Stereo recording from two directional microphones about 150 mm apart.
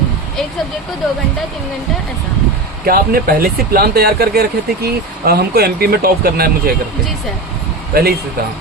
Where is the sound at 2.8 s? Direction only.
85° right.